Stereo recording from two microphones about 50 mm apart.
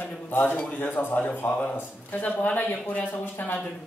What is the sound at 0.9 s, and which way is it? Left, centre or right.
Speech, left.